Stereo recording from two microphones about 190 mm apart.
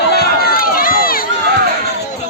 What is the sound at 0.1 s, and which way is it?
Run, 55° left (ahead or behind).